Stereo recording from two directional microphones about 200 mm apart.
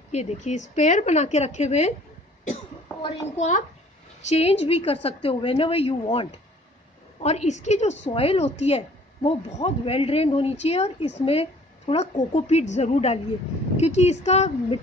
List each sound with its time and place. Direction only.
0.1 s a child's voice: 35° left (ahead or behind)
7.2 s speech: 35° left (ahead or behind)